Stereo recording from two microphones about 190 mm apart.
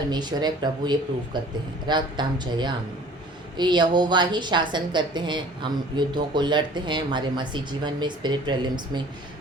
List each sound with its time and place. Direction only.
0.1 s a woman's voice: 20° right (ahead or behind)